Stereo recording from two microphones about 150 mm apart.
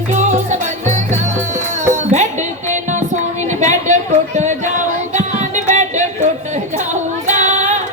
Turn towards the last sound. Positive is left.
turn(degrees=-50)  # may be behind; listen again after turning